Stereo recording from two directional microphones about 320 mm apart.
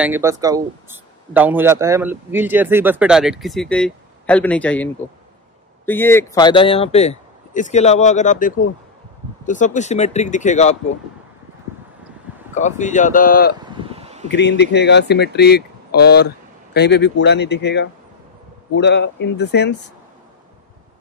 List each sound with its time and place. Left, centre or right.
0.0 s speech: centre
5.9 s speech: centre
12.5 s speech: left
13.7 s a sound: centre
14.3 s speech: left